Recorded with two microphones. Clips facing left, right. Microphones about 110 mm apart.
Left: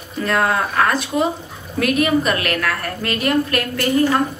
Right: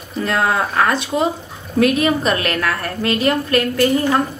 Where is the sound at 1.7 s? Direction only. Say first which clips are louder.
Right 2 dB; 30° right (ahead or behind).